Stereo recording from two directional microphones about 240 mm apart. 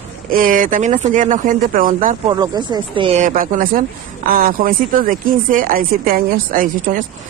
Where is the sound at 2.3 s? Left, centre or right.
Centre.